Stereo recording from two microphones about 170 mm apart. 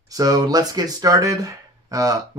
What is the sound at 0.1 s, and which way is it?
Speech, 20° right (ahead or behind).